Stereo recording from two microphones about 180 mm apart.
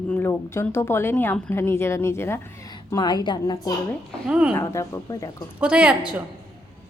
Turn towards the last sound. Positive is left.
turn(degrees=-5)  # may be behind; listen again after turning